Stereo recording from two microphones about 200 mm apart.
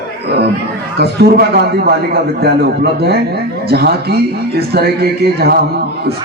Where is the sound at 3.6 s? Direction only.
55° right (ahead or behind).